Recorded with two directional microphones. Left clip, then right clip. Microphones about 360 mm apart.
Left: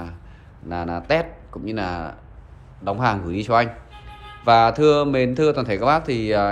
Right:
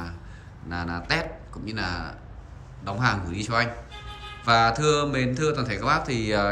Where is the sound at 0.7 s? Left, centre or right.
Centre.